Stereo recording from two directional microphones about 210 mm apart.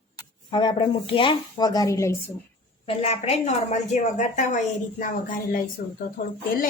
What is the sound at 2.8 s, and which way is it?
A woman's voice, 30° left (ahead or behind).